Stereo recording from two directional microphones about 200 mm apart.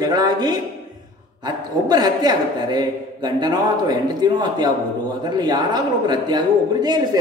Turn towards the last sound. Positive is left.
turn(degrees=-20)  # may be behind; listen again after turning